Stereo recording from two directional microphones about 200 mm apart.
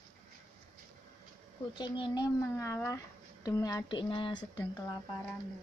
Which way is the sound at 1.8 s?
20° left (ahead or behind).